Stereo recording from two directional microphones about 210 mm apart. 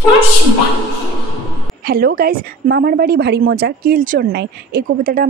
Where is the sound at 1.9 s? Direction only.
50° right (ahead or behind).